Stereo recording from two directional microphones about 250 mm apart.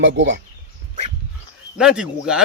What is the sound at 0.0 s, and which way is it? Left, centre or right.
Speech, right.